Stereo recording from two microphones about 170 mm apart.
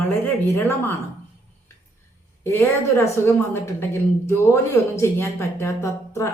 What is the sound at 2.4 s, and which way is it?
A woman's voice, 15° left (ahead or behind).